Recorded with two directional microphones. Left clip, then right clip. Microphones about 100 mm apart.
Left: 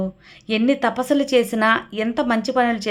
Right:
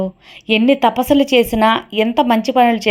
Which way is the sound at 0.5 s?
35° right (ahead or behind).